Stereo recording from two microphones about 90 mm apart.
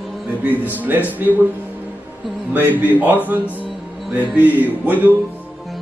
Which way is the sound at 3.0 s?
20° right (ahead or behind).